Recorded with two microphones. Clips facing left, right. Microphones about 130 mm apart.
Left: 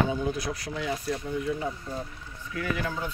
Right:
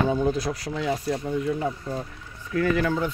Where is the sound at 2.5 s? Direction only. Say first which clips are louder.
Right 10 dB; 50° right (ahead or behind).